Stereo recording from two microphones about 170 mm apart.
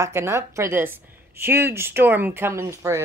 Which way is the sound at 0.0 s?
15° right (ahead or behind).